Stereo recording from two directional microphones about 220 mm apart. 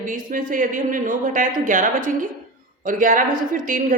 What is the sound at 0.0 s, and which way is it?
A woman's voice, 35° right (ahead or behind).